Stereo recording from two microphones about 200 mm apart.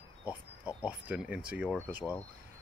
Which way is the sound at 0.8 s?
5° right (ahead or behind).